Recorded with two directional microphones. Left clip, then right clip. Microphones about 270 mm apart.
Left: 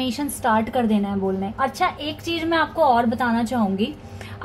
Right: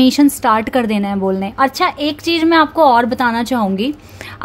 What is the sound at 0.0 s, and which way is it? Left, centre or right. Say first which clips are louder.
A woman's voice: right 11 dB; right.